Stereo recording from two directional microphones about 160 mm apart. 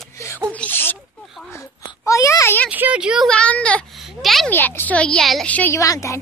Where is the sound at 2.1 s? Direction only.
20° left (ahead or behind).